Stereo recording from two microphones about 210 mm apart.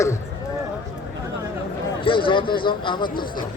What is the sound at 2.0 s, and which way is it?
Speech, 25° left (ahead or behind).